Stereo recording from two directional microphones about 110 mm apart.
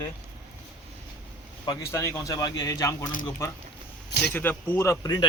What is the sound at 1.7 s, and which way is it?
Speech, 30° left (ahead or behind).